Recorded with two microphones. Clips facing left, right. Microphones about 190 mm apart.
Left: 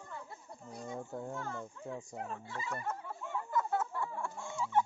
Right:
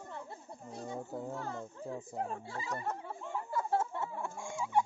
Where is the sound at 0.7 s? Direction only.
25° right (ahead or behind).